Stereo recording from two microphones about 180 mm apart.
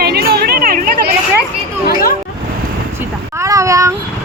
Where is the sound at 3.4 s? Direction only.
15° right (ahead or behind).